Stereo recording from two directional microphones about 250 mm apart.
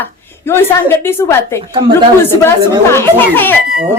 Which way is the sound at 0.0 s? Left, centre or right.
Centre.